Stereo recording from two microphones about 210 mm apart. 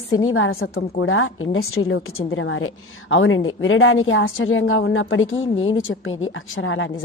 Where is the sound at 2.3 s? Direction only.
70° left (ahead or behind).